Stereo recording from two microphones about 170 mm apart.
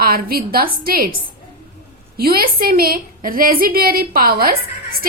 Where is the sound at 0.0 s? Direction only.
60° right (ahead or behind).